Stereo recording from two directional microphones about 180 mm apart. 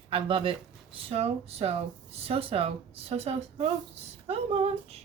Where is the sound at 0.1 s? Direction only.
30° right (ahead or behind).